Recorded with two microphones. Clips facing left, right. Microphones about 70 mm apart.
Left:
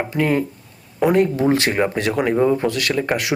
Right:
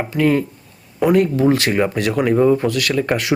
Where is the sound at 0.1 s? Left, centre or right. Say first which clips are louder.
Right 5 dB; centre.